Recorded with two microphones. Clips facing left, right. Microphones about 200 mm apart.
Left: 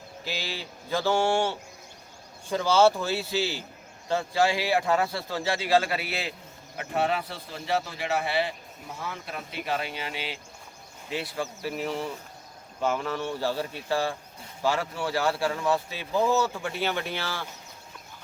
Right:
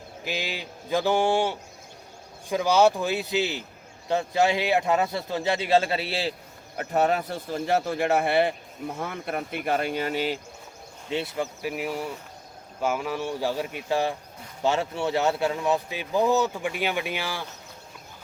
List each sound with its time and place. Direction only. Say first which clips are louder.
0.3 s speech: right 3 dB; 15° right (ahead or behind)
6.7 s a man's voice: right 4 dB; 45° right (ahead or behind)
11.1 s speech: right 3 dB; 25° right (ahead or behind)